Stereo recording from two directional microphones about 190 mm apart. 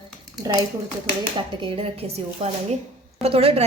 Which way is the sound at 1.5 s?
25° right (ahead or behind).